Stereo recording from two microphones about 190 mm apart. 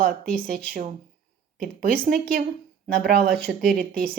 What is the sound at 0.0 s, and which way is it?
Speech, 50° right (ahead or behind).